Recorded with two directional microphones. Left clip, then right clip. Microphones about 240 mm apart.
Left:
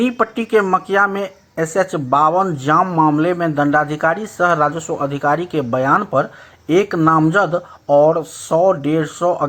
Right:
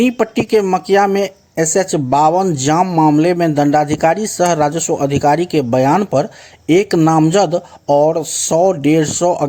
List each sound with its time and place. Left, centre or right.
0.0 s speech: right